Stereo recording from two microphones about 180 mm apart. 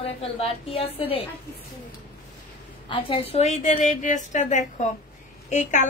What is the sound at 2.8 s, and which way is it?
A woman's voice, 30° left (ahead or behind).